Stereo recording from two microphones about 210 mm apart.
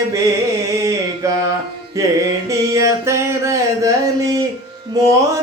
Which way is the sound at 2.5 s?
15° right (ahead or behind).